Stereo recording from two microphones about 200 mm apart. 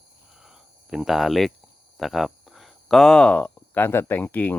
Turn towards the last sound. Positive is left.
turn(degrees=10)  # may be behind; listen again after turning